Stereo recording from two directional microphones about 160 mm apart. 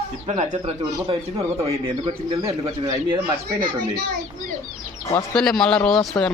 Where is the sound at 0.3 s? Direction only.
45° right (ahead or behind).